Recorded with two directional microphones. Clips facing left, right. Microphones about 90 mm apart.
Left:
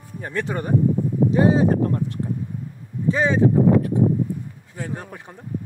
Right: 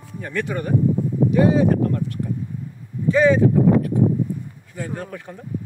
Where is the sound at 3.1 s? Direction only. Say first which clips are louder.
Right 5 dB; 25° left (ahead or behind).